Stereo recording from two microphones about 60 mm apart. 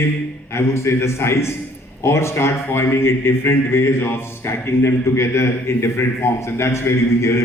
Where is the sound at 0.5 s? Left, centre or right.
Left.